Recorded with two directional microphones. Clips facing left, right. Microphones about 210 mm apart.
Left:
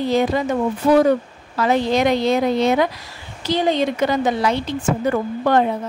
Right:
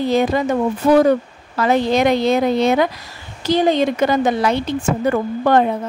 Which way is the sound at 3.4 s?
45° right (ahead or behind).